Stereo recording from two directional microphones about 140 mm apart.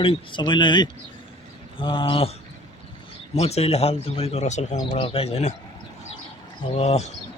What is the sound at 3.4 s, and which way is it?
Speech, 50° left (ahead or behind).